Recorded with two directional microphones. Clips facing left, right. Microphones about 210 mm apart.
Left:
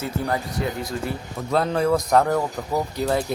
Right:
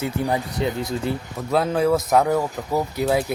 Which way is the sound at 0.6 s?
25° right (ahead or behind).